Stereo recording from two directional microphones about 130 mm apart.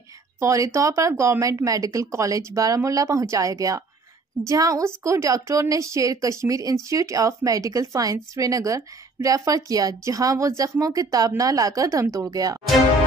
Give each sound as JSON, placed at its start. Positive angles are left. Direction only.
{"t": 0.4, "sound": "a woman's voice", "side_deg": -25}